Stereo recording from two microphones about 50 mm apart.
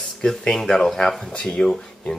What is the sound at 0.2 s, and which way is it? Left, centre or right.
Speech, centre.